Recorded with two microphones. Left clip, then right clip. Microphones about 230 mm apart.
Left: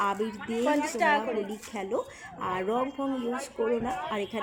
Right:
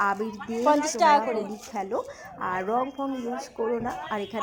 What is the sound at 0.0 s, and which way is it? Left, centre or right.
Speech, centre.